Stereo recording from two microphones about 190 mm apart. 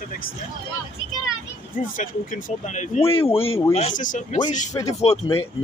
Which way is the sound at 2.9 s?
40° left (ahead or behind).